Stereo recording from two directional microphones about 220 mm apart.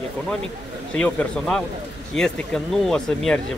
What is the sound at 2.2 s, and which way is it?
Speech, centre (ahead or behind).